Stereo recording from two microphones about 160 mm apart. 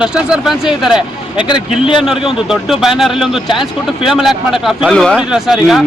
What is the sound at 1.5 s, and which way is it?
Speech, 30° left (ahead or behind).